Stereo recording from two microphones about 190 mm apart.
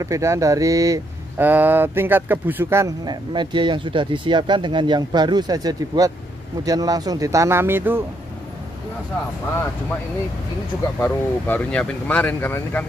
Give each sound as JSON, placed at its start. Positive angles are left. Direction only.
{"t": 0.0, "sound": "speech", "side_deg": -15}
{"t": 11.0, "sound": "speech", "side_deg": 10}